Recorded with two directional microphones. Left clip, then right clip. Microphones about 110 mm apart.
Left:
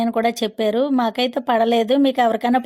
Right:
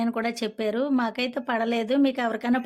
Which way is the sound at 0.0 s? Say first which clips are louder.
Left 8 dB; 35° left (ahead or behind).